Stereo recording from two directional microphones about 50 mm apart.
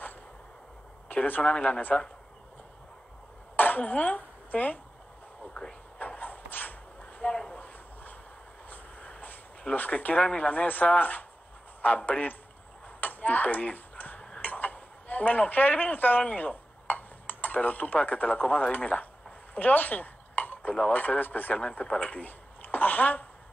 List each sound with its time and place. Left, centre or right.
1.0 s a sound: left
1.4 s speech: left
3.5 s a sound: left
5.5 s speech: centre
5.9 s a sound: left
8.6 s vehicle: left
9.8 s speech: left
12.8 s a sound: left
14.4 s speech: left
19.5 s dishes: left
20.9 s speech: left
21.5 s speech: centre
22.0 s speech: left